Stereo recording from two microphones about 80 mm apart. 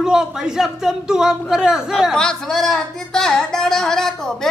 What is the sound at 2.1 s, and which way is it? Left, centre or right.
Speech, centre.